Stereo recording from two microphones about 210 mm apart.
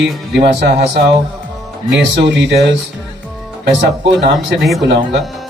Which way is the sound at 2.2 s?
55° right (ahead or behind).